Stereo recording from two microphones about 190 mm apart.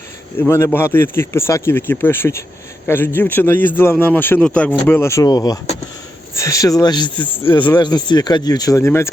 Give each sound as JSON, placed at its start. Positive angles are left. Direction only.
{"t": 0.3, "sound": "a man's voice", "side_deg": 15}